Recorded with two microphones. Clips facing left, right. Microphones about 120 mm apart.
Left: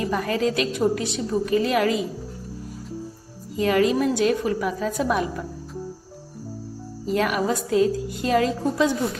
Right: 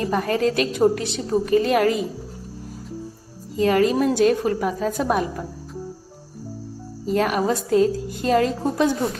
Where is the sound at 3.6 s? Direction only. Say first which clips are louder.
Right 2 dB; 35° right (ahead or behind).